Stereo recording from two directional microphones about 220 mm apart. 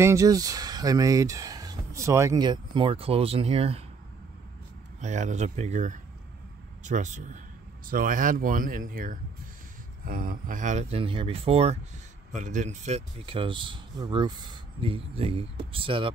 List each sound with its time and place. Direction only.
0.0 s speech: 15° right (ahead or behind)
5.0 s a man's voice: 30° right (ahead or behind)